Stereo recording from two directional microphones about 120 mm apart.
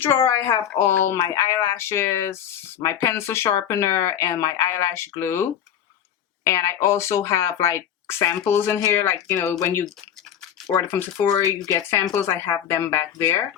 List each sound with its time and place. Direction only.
0.0 s speech: 20° left (ahead or behind)
11.3 s speech: 30° left (ahead or behind)